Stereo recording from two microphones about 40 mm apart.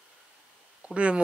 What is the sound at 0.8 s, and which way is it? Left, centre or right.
Speech, right.